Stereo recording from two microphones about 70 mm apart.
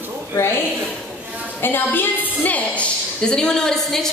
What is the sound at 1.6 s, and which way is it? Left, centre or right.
A woman's voice, left.